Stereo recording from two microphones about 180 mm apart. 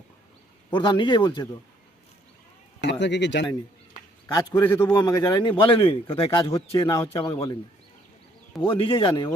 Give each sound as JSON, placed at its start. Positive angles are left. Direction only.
{"t": 0.7, "sound": "a man's voice", "side_deg": 25}
{"t": 3.0, "sound": "speech", "side_deg": 75}
{"t": 4.3, "sound": "a man's voice", "side_deg": 20}
{"t": 6.4, "sound": "a man's voice", "side_deg": 20}
{"t": 8.6, "sound": "a man's voice", "side_deg": 30}